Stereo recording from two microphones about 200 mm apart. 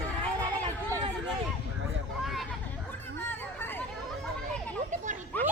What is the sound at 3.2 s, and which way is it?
Hubbub, 10° left (ahead or behind).